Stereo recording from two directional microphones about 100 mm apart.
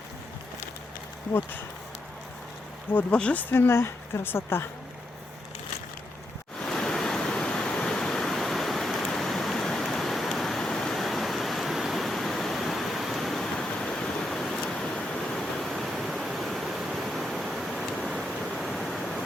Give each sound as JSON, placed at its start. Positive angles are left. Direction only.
{"t": 2.9, "sound": "speech", "side_deg": 10}
{"t": 3.5, "sound": "a woman's voice", "side_deg": 25}
{"t": 6.6, "sound": "waves", "side_deg": 5}
{"t": 18.0, "sound": "a sound", "side_deg": -5}